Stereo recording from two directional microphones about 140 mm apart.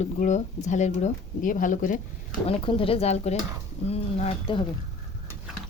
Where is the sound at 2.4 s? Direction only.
40° left (ahead or behind).